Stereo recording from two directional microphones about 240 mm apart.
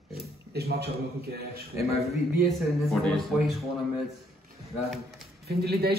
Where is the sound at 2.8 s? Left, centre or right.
Centre.